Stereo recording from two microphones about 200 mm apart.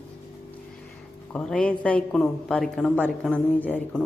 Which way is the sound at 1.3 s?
5° left (ahead or behind).